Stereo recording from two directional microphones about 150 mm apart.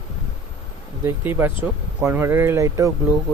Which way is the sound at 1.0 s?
15° right (ahead or behind).